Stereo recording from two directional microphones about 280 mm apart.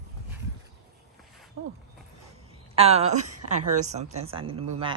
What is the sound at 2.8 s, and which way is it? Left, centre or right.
A woman's voice, right.